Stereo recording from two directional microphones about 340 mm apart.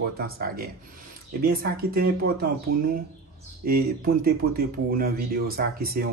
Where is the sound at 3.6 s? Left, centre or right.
Right.